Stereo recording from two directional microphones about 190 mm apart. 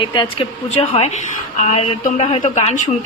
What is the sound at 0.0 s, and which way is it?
A woman's voice, 25° left (ahead or behind).